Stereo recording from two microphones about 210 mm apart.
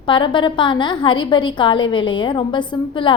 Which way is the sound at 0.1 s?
25° left (ahead or behind).